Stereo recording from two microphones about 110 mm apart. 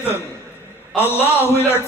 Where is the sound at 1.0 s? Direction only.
20° left (ahead or behind).